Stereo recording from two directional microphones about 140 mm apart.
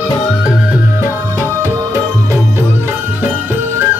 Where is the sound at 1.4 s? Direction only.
20° right (ahead or behind).